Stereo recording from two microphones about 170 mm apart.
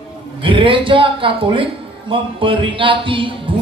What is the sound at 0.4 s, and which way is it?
Speech, 30° right (ahead or behind).